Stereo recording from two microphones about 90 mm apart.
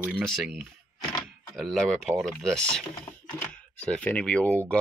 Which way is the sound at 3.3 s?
20° left (ahead or behind).